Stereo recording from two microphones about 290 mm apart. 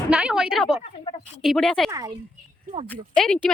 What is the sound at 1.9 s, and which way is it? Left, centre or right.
Speech, centre.